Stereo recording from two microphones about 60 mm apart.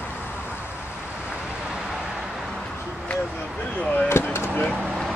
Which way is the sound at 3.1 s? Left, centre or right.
Centre.